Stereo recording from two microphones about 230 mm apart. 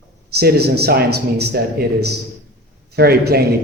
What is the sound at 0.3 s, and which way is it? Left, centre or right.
A man's voice, right.